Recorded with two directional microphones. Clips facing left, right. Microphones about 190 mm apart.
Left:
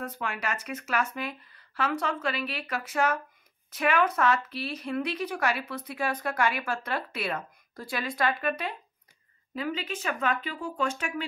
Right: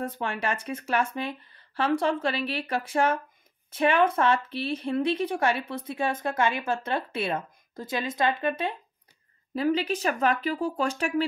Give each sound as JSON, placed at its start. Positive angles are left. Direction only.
{"t": 0.0, "sound": "a woman's voice", "side_deg": -30}
{"t": 9.6, "sound": "speech", "side_deg": -40}